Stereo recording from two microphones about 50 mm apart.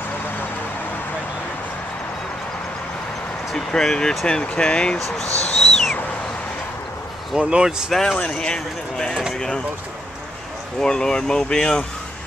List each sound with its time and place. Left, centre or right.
3.5 s speech: centre
5.1 s owl: centre
7.3 s speech: centre
7.9 s speech: centre
8.2 s speech: centre
10.8 s speech: centre